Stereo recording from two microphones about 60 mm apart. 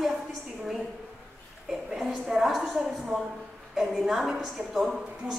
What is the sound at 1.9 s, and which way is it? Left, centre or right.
A woman's voice, centre.